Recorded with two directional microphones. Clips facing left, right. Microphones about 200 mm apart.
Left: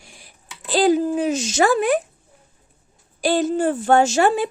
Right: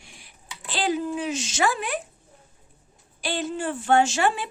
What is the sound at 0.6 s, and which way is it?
Speech, 40° left (ahead or behind).